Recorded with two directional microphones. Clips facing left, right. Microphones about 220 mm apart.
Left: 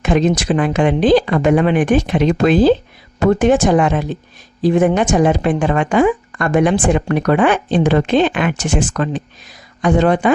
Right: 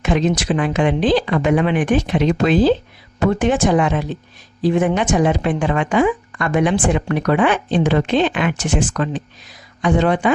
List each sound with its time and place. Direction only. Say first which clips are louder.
0.0 s speech: left 3 dB; 45° left (ahead or behind)